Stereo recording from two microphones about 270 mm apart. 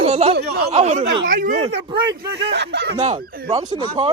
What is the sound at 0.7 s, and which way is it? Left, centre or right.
Speech, right.